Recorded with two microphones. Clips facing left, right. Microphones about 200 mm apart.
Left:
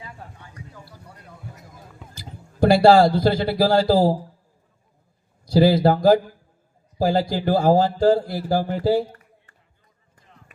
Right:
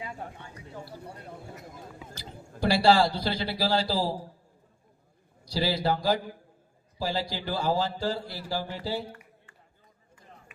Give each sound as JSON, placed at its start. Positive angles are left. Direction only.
{"t": 0.0, "sound": "a sound", "side_deg": -25}
{"t": 2.1, "sound": "a man's voice", "side_deg": 50}
{"t": 5.5, "sound": "a man's voice", "side_deg": 50}